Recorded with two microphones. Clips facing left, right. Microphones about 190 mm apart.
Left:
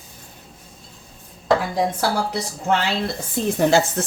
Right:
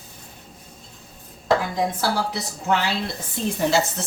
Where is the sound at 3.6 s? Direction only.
55° left (ahead or behind).